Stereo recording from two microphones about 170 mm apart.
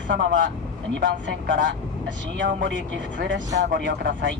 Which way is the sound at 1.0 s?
90° right.